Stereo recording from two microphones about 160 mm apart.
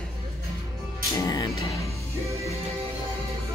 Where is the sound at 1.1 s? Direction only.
25° left (ahead or behind).